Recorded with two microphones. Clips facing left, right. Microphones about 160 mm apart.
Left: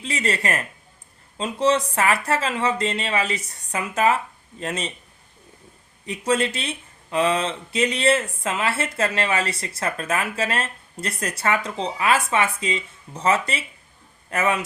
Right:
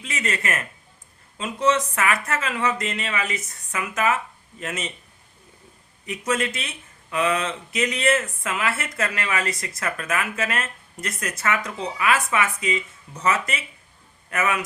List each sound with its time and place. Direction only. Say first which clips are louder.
0.0 s speech: left 3 dB; 30° left (ahead or behind)
6.1 s speech: left 3 dB; 30° left (ahead or behind)